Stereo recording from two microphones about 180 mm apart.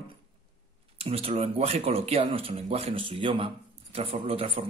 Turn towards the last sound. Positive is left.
turn(degrees=-30)  # may be behind; listen again after turning